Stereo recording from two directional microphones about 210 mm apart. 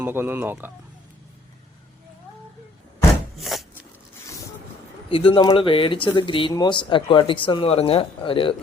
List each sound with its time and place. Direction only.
0.0 s speech: 10° right (ahead or behind)
3.3 s a sound: centre (ahead or behind)
5.1 s speech: 25° left (ahead or behind)